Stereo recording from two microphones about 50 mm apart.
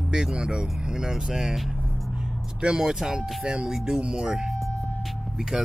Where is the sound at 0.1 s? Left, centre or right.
Centre.